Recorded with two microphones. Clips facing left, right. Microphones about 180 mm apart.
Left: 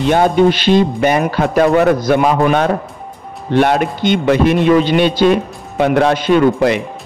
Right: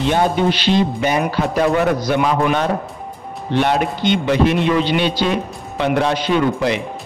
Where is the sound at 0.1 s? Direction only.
50° left (ahead or behind).